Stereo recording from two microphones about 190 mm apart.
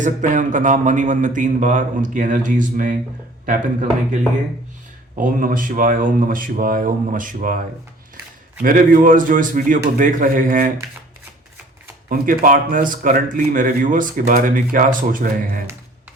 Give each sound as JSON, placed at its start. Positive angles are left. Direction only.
{"t": 0.0, "sound": "speech", "side_deg": -40}
{"t": 8.6, "sound": "speech", "side_deg": -45}
{"t": 12.0, "sound": "speech", "side_deg": -45}